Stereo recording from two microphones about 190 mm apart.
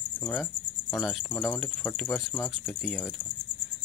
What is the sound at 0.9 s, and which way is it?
Speech, centre (ahead or behind).